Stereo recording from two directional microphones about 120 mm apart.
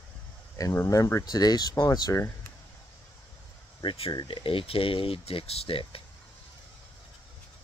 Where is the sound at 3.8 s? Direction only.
45° left (ahead or behind).